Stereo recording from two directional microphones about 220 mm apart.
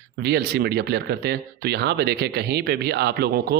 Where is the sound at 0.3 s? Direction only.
45° right (ahead or behind).